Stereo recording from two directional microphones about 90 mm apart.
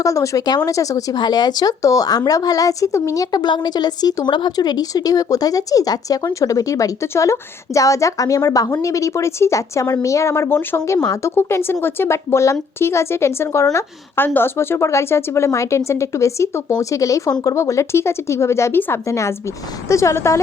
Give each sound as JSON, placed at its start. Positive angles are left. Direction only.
{"t": 0.0, "sound": "a woman's voice", "side_deg": 40}
{"t": 3.3, "sound": "a woman's voice", "side_deg": 55}